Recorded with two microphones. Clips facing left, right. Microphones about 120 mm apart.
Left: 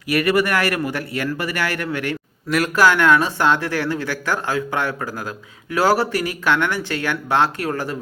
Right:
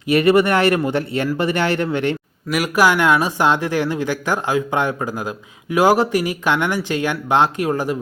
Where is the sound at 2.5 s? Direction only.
10° right (ahead or behind).